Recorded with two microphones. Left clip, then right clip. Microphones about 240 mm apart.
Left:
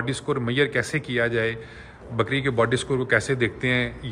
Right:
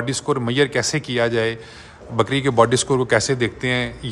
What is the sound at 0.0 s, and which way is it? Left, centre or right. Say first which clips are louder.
A man's voice: right 4 dB; centre.